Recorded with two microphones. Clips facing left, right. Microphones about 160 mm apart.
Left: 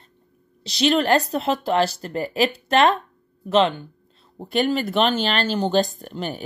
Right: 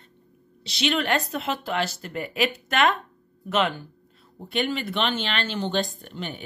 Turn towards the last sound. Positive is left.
turn(degrees=40)  # may be behind; listen again after turning